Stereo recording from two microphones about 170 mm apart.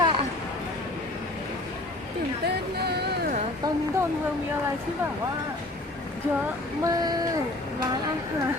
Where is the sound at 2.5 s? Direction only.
70° right (ahead or behind).